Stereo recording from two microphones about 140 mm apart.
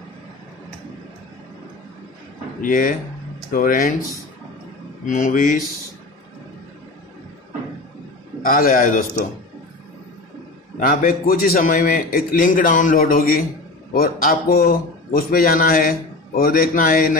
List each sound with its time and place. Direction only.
2.6 s speech: 75° left (ahead or behind)
3.5 s a man's voice: 90° left
5.0 s speech: 65° left (ahead or behind)
8.4 s a man's voice: 90° left
10.8 s a man's voice: 80° left